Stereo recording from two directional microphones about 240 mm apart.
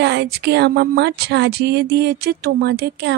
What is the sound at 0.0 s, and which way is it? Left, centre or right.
Speech, right.